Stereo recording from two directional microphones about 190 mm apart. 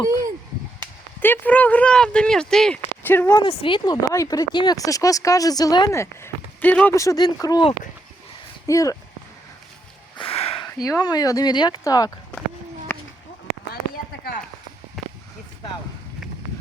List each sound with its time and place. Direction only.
1.2 s a woman's voice: 10° left (ahead or behind)
3.4 s speech: 30° left (ahead or behind)
10.2 s sniff: 30° left (ahead or behind)
10.8 s speech: 20° left (ahead or behind)
12.9 s a sound: 15° left (ahead or behind)
15.0 s a sound: centre (ahead or behind)